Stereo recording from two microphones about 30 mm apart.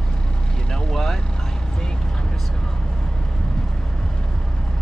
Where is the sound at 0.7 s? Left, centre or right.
Centre.